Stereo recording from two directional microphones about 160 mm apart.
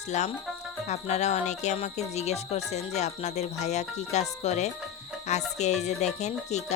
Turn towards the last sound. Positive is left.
turn(degrees=45)  # may be behind; listen again after turning